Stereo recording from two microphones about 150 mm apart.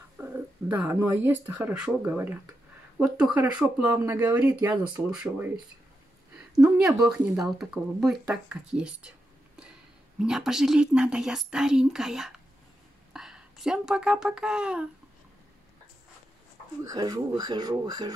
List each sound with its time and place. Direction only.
0.2 s speech: 15° right (ahead or behind)
6.8 s speech: 5° right (ahead or behind)
10.1 s a child's voice: 5° right (ahead or behind)
16.8 s speech: 25° right (ahead or behind)